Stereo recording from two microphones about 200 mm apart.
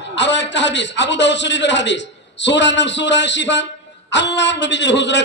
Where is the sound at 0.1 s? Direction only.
65° left (ahead or behind).